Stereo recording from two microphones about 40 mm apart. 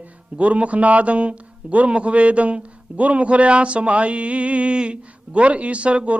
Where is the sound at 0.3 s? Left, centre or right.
Right.